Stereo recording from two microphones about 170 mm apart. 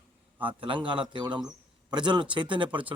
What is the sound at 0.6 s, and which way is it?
A man's voice, 30° right (ahead or behind).